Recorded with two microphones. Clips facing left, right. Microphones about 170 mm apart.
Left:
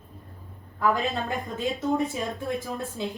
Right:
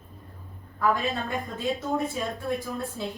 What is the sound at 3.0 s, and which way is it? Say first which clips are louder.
Speech: left 2 dB; 20° left (ahead or behind).